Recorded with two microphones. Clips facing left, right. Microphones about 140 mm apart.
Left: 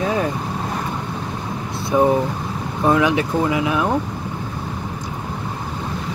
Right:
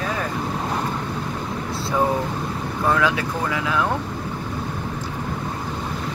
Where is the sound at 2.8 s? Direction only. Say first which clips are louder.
Left 4 dB; 20° left (ahead or behind).